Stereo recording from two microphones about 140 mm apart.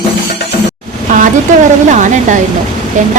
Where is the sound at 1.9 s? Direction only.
65° right (ahead or behind).